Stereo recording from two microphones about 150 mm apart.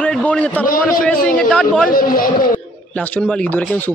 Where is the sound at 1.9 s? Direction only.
70° left (ahead or behind).